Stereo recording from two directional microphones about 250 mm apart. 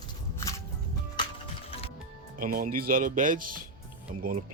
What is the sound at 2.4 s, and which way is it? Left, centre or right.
Speech, right.